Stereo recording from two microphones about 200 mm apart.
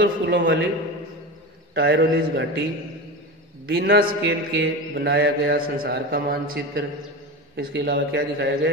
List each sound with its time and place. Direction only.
0.0 s a man's voice: 65° right (ahead or behind)
1.7 s a man's voice: 55° right (ahead or behind)
3.6 s mantra: 55° right (ahead or behind)
7.5 s a man's voice: 60° right (ahead or behind)